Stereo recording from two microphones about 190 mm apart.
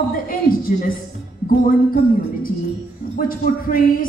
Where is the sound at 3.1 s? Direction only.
50° left (ahead or behind).